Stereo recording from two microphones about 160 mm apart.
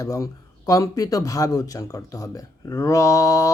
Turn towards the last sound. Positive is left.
turn(degrees=20)  # may be behind; listen again after turning